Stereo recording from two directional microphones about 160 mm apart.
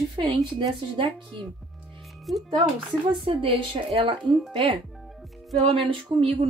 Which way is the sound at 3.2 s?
35° right (ahead or behind).